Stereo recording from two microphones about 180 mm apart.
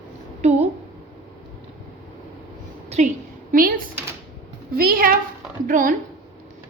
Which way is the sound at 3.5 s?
50° right (ahead or behind).